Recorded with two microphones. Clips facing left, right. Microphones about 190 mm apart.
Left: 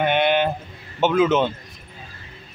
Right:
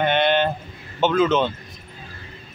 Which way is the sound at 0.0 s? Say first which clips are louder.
Even; 10° left (ahead or behind).